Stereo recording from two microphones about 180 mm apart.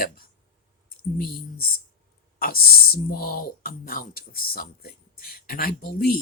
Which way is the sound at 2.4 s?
55° left (ahead or behind).